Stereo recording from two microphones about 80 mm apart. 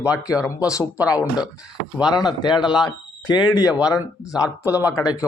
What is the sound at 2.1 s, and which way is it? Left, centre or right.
Speech, left.